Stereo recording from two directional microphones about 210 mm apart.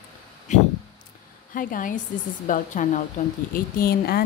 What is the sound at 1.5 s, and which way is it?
A woman's voice, 40° left (ahead or behind).